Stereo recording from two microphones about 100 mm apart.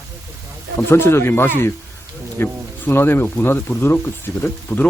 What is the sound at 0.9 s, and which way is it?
A man's voice, 25° left (ahead or behind).